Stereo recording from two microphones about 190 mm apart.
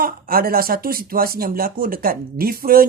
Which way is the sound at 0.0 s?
50° right (ahead or behind).